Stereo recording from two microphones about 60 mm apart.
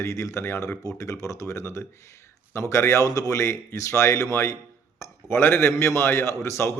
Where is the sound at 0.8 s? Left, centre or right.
Left.